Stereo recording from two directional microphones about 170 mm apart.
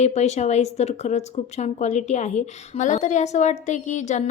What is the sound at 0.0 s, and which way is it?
Speech, 40° left (ahead or behind).